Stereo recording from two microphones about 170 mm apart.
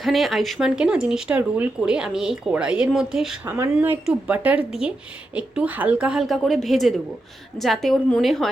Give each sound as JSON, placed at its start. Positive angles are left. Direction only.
{"t": 0.0, "sound": "speech", "side_deg": 0}